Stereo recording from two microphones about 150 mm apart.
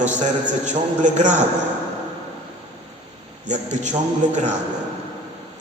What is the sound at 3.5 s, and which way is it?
Speech, 50° right (ahead or behind).